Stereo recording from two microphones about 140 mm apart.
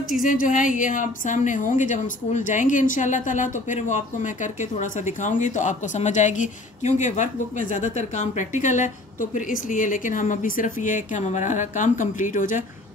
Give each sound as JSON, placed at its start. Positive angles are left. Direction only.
{"t": 0.2, "sound": "a woman's voice", "side_deg": 70}